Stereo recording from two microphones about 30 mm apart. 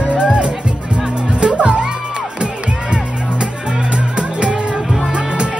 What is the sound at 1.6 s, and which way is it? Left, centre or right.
Music, right.